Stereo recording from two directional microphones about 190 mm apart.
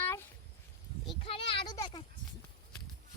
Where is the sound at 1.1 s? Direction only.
30° left (ahead or behind).